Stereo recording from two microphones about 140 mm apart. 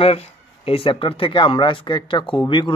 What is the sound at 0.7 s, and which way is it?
Speech, 40° left (ahead or behind).